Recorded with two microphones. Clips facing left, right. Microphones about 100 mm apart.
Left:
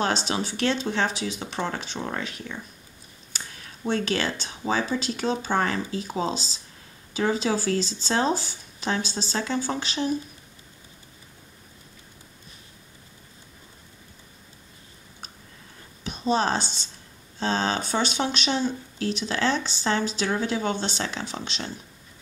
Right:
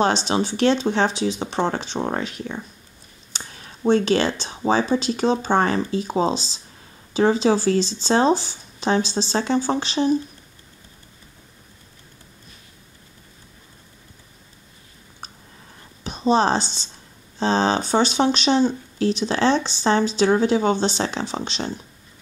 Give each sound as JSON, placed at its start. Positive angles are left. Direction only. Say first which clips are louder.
{"t": 0.0, "sound": "speech", "louder": "right 6 dB", "side_deg": -25}
{"t": 16.0, "sound": "speech", "louder": "right 5 dB", "side_deg": -25}